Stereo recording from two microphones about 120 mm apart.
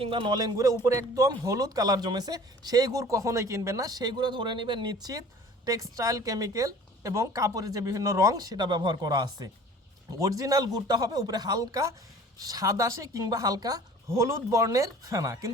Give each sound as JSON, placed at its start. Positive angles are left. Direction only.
{"t": 0.0, "sound": "a man's voice", "side_deg": -50}
{"t": 0.3, "sound": "a woman's voice", "side_deg": -30}